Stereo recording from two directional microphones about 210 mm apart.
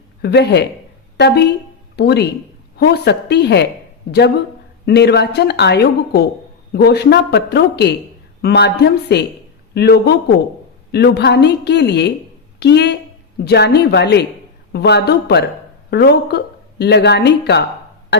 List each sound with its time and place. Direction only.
0.2 s a man's voice: 50° left (ahead or behind)
4.9 s a woman's voice: 50° left (ahead or behind)